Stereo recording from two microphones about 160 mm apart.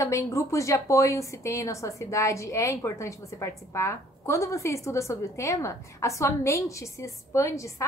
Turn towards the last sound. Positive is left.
turn(degrees=20)  # may be behind; listen again after turning